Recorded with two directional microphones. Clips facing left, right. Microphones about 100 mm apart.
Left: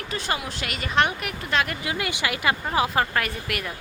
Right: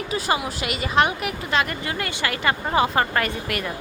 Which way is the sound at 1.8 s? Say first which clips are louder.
Right 1 dB; 10° left (ahead or behind).